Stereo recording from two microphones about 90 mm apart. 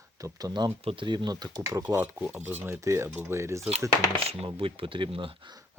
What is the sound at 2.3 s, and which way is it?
Speech, 25° right (ahead or behind).